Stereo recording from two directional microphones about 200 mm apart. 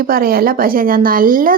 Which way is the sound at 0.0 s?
45° right (ahead or behind).